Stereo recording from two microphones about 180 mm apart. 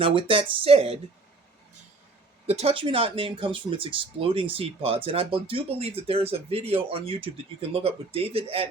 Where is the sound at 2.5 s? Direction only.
35° right (ahead or behind).